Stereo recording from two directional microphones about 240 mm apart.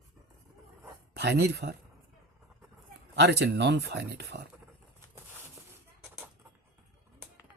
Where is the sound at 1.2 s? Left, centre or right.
Right.